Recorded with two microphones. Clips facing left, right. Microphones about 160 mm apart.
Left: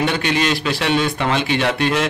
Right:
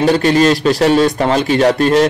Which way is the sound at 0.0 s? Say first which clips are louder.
Right 8 dB; 40° right (ahead or behind).